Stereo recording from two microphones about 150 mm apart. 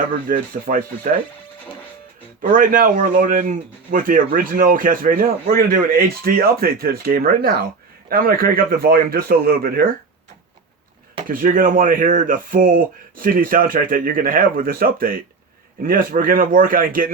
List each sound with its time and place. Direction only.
0.3 s speech: 70° right (ahead or behind)
2.4 s speech: 65° right (ahead or behind)
11.3 s speech: 65° right (ahead or behind)